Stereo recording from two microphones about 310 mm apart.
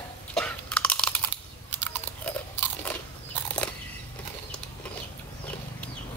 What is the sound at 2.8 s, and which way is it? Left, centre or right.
Biting, centre.